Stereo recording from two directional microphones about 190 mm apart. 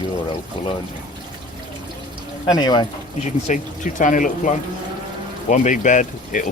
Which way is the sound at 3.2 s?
40° left (ahead or behind).